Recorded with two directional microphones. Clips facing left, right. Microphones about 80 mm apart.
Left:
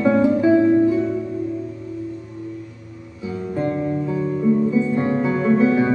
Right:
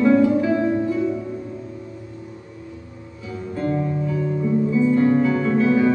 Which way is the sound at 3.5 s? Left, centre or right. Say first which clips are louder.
Left 1 dB; left.